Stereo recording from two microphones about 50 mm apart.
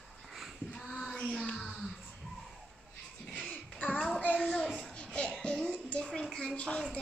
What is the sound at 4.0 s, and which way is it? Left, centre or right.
Child singing, centre.